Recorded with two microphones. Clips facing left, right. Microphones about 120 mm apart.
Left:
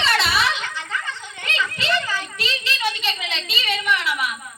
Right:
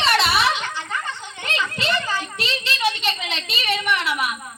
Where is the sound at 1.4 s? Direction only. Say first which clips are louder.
Right 1 dB; 25° right (ahead or behind).